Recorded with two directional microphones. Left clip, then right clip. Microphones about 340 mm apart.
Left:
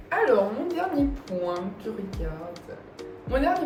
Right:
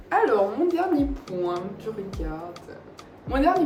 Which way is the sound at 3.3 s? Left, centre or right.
Centre.